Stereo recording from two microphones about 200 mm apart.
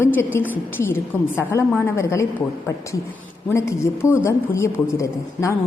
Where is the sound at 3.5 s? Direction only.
15° left (ahead or behind).